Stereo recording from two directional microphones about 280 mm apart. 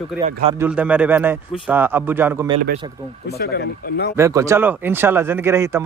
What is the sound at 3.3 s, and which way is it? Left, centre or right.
Speech, left.